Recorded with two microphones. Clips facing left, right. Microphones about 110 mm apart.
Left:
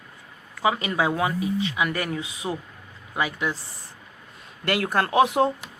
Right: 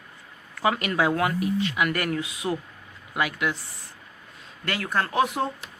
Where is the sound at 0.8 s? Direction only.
15° left (ahead or behind).